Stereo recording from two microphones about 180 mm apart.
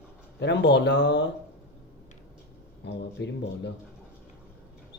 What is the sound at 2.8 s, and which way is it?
Speech, 75° left (ahead or behind).